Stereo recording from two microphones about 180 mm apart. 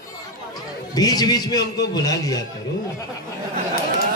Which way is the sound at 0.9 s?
20° left (ahead or behind).